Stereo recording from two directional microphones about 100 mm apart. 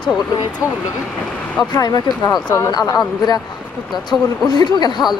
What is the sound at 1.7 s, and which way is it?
Speech, 40° left (ahead or behind).